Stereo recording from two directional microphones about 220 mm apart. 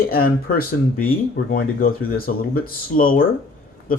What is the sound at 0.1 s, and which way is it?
Speech, 45° left (ahead or behind).